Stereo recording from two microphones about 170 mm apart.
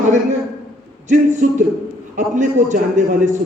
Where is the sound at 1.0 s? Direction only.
45° right (ahead or behind).